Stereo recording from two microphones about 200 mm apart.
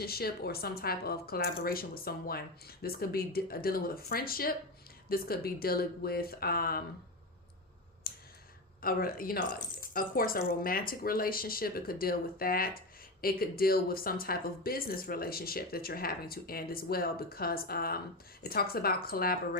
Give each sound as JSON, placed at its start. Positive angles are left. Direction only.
{"t": 0.0, "sound": "speech", "side_deg": 50}
{"t": 8.8, "sound": "speech", "side_deg": 45}